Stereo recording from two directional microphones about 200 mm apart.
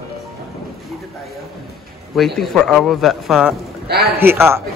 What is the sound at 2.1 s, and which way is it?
Speech, centre (ahead or behind).